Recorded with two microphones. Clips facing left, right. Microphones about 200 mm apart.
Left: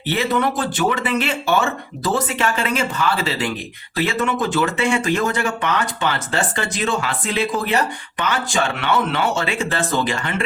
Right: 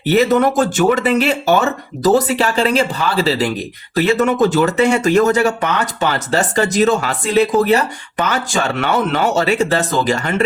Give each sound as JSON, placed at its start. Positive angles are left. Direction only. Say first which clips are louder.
{"t": 0.1, "sound": "speech", "louder": "right 7 dB", "side_deg": -40}